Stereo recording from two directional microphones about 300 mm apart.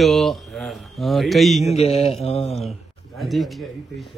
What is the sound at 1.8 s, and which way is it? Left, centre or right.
Mantra, centre.